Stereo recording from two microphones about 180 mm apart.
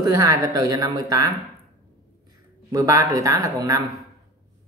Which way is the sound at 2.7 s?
20° right (ahead or behind).